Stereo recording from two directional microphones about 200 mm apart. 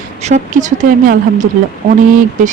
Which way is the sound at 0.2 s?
35° right (ahead or behind).